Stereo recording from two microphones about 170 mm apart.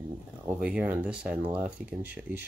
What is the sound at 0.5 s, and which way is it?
Speech, 5° right (ahead or behind).